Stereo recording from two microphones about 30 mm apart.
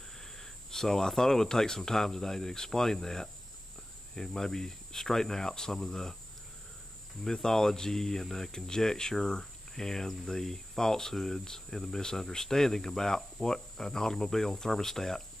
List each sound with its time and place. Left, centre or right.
0.2 s speech: centre
7.2 s speech: centre
8.5 s speech: left
9.4 s cricket: centre
10.2 s speech: centre